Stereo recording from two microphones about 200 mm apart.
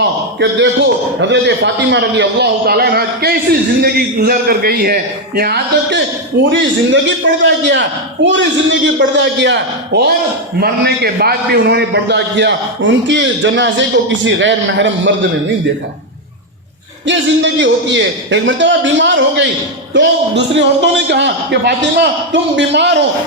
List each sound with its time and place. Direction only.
0.0 s a sound: 60° right (ahead or behind)
1.2 s a man's voice: 60° right (ahead or behind)
6.4 s a man's voice: 65° right (ahead or behind)
17.1 s a man's voice: 65° right (ahead or behind)